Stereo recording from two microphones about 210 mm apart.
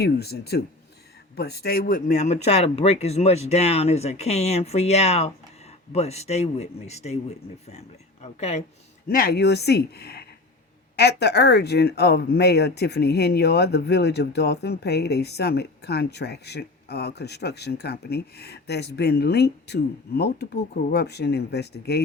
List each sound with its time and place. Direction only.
0.0 s speech: 50° left (ahead or behind); by 8.6 s 30° left (ahead or behind)
9.0 s speech: 45° left (ahead or behind)